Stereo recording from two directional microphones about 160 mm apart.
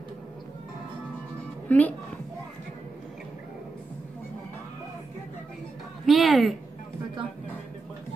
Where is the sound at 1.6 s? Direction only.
10° left (ahead or behind).